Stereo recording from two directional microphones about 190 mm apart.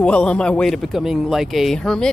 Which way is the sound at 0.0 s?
5° left (ahead or behind).